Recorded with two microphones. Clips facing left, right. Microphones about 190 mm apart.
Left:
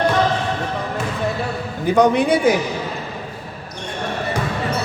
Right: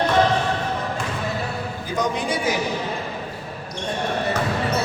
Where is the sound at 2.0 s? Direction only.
60° left (ahead or behind).